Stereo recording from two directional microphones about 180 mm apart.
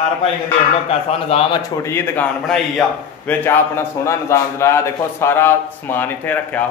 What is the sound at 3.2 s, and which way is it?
A man's voice, 15° left (ahead or behind).